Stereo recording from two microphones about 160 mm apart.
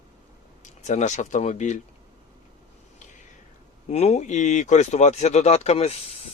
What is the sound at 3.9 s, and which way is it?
Speech, 45° left (ahead or behind).